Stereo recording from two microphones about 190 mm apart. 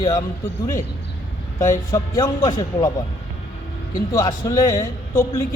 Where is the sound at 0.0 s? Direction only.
20° left (ahead or behind).